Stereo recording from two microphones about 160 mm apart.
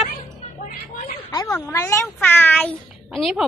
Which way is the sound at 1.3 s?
25° left (ahead or behind).